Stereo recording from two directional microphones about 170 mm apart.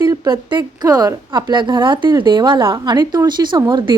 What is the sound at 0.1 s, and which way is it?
A woman's voice, 25° right (ahead or behind).